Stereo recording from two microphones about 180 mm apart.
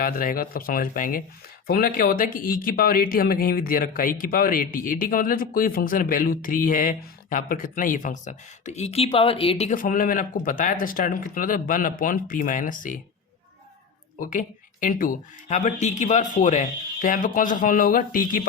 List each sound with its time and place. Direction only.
0.0 s speech: 50° left (ahead or behind)
14.2 s speech: 45° left (ahead or behind)